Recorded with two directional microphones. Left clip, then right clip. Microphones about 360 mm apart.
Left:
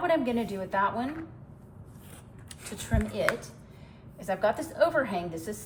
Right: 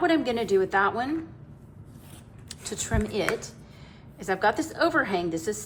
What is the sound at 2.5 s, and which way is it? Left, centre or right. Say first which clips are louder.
A woman's voice: right 4 dB; centre.